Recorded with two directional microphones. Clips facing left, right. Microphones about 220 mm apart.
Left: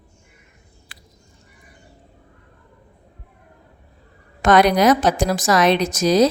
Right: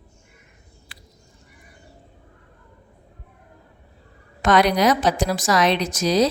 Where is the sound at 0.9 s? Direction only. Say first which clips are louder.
Right 1 dB; 45° left (ahead or behind).